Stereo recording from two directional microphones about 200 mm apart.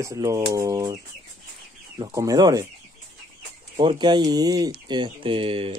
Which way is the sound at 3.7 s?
20° right (ahead or behind).